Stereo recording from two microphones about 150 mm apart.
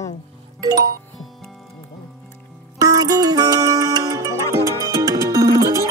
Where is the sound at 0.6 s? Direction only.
25° right (ahead or behind).